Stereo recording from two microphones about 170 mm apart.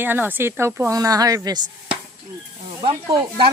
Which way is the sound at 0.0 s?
10° right (ahead or behind).